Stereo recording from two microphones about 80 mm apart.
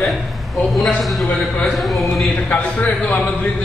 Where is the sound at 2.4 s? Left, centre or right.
Centre.